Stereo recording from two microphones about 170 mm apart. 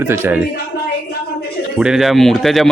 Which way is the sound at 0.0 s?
10° right (ahead or behind).